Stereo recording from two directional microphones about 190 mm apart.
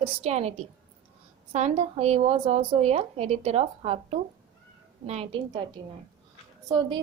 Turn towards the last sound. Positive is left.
turn(degrees=-25)  # may be behind; listen again after turning